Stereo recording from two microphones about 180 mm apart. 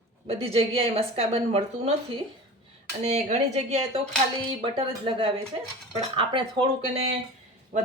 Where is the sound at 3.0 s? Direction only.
40° right (ahead or behind).